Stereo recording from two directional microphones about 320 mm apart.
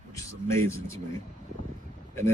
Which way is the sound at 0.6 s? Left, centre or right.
Centre.